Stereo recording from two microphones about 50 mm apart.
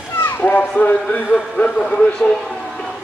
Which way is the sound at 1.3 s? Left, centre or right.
Centre.